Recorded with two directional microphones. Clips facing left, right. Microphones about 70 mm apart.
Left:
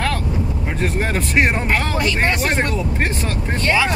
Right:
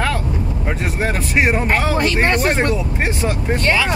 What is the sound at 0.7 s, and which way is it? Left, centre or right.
Speech, centre.